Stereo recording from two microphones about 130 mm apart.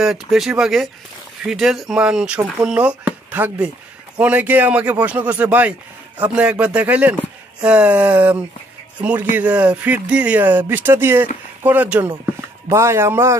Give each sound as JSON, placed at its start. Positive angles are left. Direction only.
{"t": 0.0, "sound": "speech", "side_deg": -5}